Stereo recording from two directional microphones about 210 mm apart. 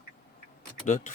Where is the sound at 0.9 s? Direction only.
40° left (ahead or behind).